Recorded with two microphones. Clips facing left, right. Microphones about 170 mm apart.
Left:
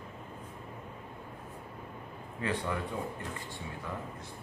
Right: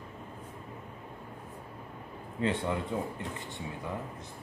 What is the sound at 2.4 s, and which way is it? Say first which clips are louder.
Speech: right 3 dB; 25° right (ahead or behind).